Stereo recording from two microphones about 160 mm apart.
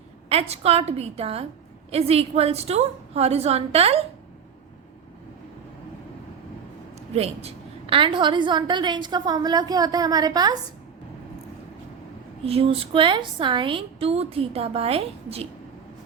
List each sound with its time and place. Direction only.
0.3 s a woman's voice: 40° right (ahead or behind)
7.1 s a woman's voice: 40° right (ahead or behind); by 10.5 s 25° right (ahead or behind)
12.5 s a woman's voice: 40° right (ahead or behind)